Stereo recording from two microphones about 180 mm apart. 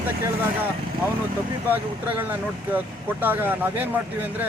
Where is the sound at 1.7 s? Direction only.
10° right (ahead or behind).